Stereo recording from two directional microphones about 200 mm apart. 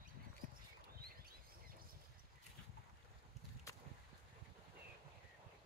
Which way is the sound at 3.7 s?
15° left (ahead or behind).